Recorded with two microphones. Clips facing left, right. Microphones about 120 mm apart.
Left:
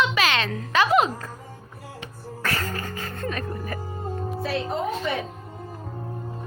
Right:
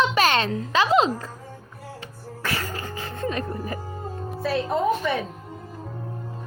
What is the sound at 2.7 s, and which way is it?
Music, 15° right (ahead or behind).